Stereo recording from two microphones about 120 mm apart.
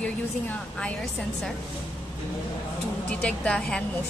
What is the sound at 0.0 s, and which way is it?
Speech, 10° left (ahead or behind).